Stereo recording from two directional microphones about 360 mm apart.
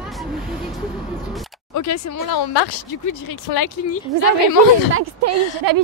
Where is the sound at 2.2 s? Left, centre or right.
Left.